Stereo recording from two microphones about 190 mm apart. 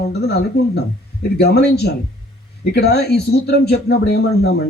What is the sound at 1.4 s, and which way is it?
Speech, 60° left (ahead or behind).